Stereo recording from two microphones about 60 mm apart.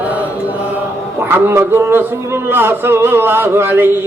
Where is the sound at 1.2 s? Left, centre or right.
Right.